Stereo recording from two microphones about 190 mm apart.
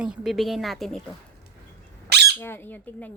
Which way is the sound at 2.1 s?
60° right (ahead or behind).